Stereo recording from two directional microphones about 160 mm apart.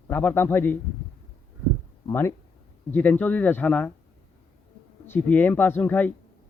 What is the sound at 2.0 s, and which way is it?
Speech, 15° left (ahead or behind).